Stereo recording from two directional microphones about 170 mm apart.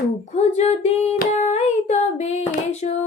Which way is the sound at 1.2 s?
40° left (ahead or behind).